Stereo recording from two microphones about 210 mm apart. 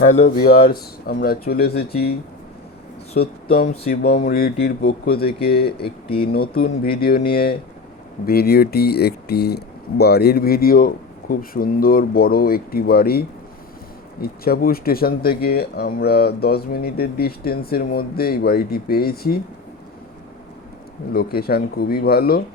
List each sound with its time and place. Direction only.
0.0 s speech: 40° left (ahead or behind)
3.1 s speech: 45° left (ahead or behind)
21.1 s speech: 45° left (ahead or behind)